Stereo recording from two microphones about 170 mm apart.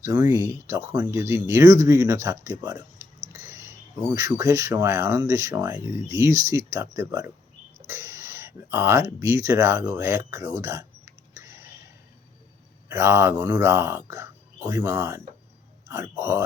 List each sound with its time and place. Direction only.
0.2 s speech: 15° right (ahead or behind)
12.9 s speech: 15° right (ahead or behind)